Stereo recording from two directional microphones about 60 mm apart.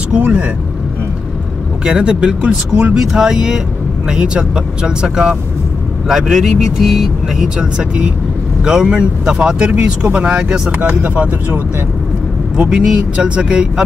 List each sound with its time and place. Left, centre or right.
0.2 s speech: right
1.9 s speech: centre
3.0 s speech: centre; by 11.6 s right
12.6 s speech: centre